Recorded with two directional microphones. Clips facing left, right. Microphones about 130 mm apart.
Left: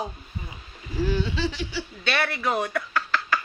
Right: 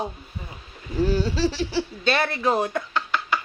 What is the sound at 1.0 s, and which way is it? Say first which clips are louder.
Speech: right 4 dB; 35° right (ahead or behind).